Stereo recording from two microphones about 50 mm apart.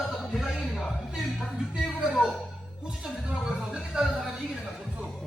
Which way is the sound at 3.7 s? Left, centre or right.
Centre.